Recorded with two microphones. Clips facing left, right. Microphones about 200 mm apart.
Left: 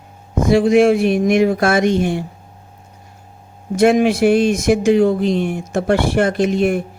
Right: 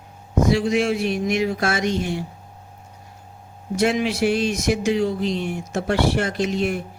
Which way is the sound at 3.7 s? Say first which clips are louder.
Left 8 dB; 50° left (ahead or behind).